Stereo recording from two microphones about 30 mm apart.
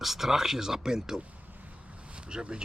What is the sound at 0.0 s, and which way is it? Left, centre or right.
Speech, centre.